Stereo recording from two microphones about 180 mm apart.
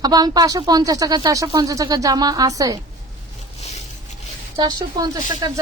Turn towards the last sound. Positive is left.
turn(degrees=-20)  # may be behind; listen again after turning